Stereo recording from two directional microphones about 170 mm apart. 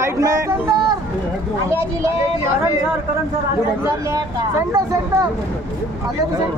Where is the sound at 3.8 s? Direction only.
20° right (ahead or behind).